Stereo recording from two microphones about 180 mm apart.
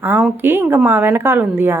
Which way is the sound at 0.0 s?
5° right (ahead or behind).